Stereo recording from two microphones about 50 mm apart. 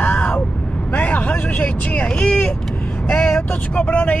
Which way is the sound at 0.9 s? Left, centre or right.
Left.